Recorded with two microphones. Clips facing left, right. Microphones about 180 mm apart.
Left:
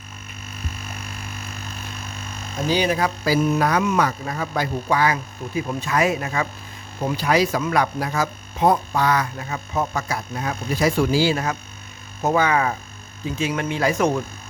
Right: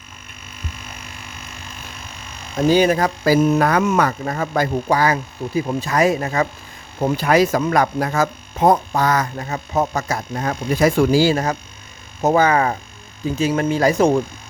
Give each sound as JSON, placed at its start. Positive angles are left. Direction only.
{"t": 2.6, "sound": "speech", "side_deg": -45}
{"t": 7.2, "sound": "speech", "side_deg": -50}